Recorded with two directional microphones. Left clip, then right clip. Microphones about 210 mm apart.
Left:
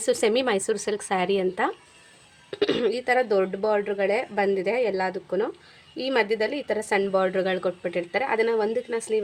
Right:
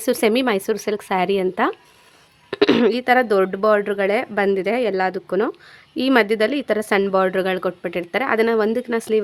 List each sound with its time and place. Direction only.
0.0 s speech: 35° right (ahead or behind)
2.5 s speech: 45° right (ahead or behind)